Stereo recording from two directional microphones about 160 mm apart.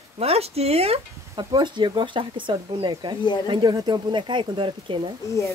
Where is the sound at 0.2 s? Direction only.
40° right (ahead or behind).